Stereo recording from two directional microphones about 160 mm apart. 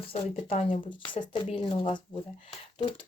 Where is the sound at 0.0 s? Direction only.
35° left (ahead or behind).